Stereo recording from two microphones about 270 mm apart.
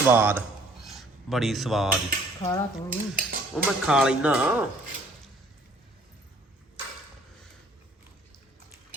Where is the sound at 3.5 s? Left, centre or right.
Centre.